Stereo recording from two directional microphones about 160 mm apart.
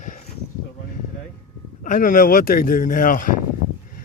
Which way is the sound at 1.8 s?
55° left (ahead or behind).